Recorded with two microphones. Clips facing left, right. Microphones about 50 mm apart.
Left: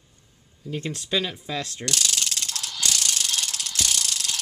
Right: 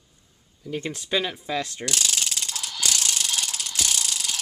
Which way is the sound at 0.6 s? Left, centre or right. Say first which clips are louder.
Even; centre.